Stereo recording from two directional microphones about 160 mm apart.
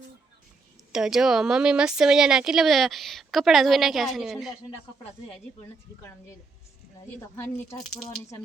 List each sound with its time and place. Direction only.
0.9 s speech: 5° right (ahead or behind)
7.3 s speech: 15° left (ahead or behind)